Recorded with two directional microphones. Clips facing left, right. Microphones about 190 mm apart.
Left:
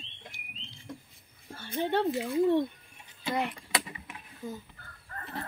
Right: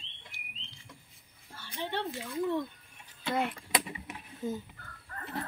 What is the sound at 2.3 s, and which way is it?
Speech, 30° left (ahead or behind).